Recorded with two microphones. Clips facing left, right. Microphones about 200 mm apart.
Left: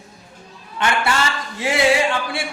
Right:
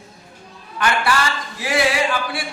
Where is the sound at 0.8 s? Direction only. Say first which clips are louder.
Even; 25° left (ahead or behind).